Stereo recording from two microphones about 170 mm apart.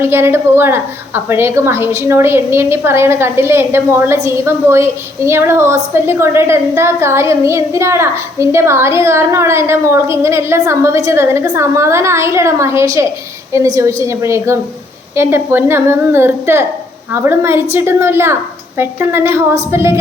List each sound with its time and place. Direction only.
0.0 s a woman's voice: 15° right (ahead or behind)